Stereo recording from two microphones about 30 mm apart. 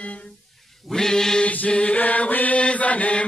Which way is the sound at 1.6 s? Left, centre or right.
Left.